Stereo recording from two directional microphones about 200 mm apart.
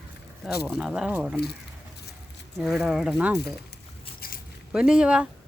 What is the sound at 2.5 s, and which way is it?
Speech, centre (ahead or behind).